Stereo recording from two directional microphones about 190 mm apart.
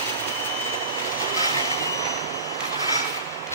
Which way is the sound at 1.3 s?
20° left (ahead or behind).